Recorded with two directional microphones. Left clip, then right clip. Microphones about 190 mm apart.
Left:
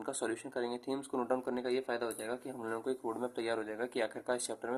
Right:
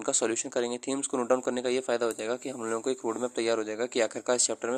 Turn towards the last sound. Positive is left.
turn(degrees=-30)  # may be behind; listen again after turning